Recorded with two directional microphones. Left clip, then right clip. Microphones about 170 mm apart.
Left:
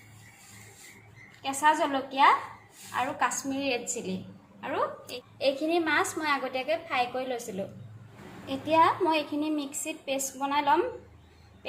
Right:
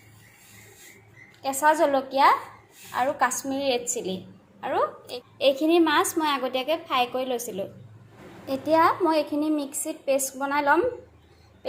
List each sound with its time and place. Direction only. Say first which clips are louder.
1.4 s a woman's voice: right 4 dB; 35° right (ahead or behind)